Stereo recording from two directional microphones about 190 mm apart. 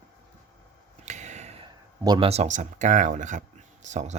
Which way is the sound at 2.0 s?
20° right (ahead or behind).